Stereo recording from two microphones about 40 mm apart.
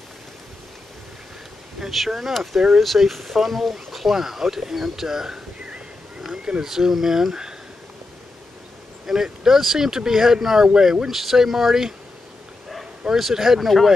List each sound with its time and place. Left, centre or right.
1.9 s speech: centre
6.3 s a sound: centre
6.6 s speech: centre
9.0 s speech: centre
13.1 s speech: centre